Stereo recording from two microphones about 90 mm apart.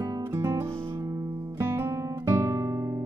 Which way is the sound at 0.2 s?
30° right (ahead or behind).